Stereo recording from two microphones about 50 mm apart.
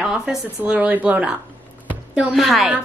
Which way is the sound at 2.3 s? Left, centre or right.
Centre.